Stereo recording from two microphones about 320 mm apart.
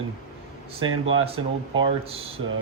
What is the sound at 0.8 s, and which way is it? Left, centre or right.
Speech, right.